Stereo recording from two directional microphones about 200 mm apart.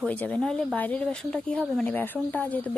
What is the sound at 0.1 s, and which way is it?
A woman's voice, 5° left (ahead or behind).